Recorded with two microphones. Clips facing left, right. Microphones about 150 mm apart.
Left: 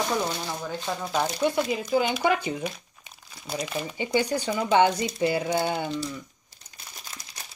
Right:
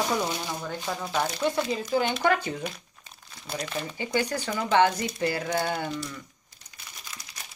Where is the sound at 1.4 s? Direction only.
10° left (ahead or behind).